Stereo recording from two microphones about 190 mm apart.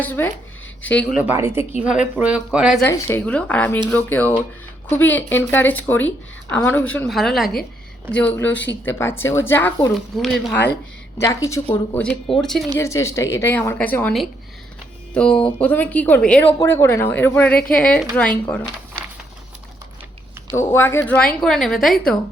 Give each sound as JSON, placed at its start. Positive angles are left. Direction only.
{"t": 0.0, "sound": "a woman's voice", "side_deg": 10}
{"t": 1.3, "sound": "a woman's voice", "side_deg": -10}
{"t": 2.8, "sound": "a woman's voice", "side_deg": 15}
{"t": 11.2, "sound": "a woman's voice", "side_deg": 15}
{"t": 12.7, "sound": "a woman's voice", "side_deg": 15}
{"t": 20.6, "sound": "a woman's voice", "side_deg": 10}